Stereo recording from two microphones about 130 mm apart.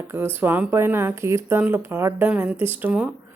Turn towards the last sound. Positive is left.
turn(degrees=-10)  # may be behind; listen again after turning